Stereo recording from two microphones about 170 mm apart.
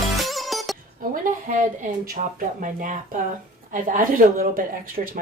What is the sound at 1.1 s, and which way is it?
Speech, 50° right (ahead or behind).